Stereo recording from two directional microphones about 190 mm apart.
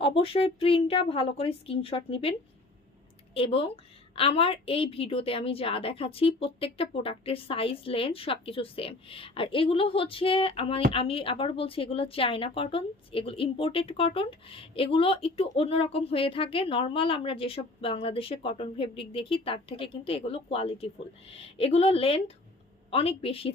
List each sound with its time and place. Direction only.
0.0 s a woman's voice: 30° left (ahead or behind)
3.3 s a woman's voice: 30° left (ahead or behind)